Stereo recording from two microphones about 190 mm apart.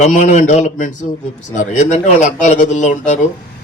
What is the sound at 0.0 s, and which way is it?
A man's voice, 40° left (ahead or behind).